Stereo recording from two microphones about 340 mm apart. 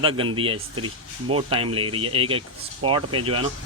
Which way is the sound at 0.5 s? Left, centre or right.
Right.